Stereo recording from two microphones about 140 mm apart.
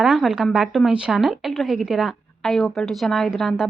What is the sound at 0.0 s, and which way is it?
A woman's voice, centre (ahead or behind).